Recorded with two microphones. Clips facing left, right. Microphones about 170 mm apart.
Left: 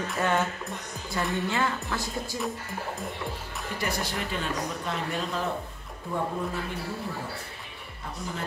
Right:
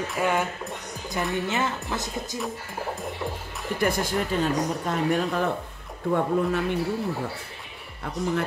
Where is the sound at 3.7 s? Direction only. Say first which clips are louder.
Right 7 dB; 50° right (ahead or behind).